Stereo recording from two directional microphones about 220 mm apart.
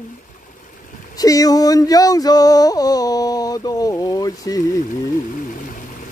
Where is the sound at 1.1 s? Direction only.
15° left (ahead or behind).